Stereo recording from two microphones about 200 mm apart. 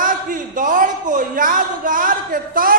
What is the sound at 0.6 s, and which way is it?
A man's voice, 40° right (ahead or behind).